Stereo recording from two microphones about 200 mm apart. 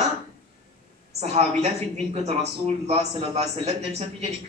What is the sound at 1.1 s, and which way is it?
A woman's voice, 35° right (ahead or behind).